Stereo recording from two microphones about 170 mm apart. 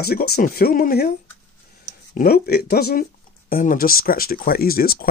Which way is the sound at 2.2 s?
65° left (ahead or behind).